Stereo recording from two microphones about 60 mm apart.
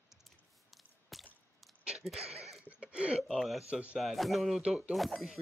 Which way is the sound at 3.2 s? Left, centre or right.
Centre.